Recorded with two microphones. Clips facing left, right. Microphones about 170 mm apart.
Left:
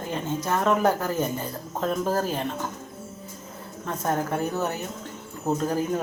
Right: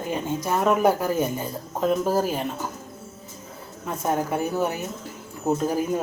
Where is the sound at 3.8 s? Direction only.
10° right (ahead or behind).